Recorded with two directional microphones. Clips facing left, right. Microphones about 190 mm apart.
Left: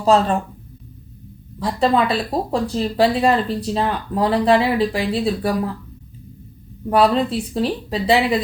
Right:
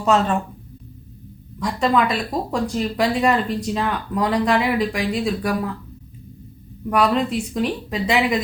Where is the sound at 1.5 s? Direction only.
30° left (ahead or behind).